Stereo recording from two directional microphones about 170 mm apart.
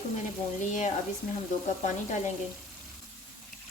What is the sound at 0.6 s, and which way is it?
Speech, 45° left (ahead or behind).